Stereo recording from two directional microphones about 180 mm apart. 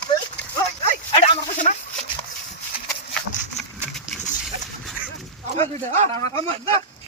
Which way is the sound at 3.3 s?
45° left (ahead or behind).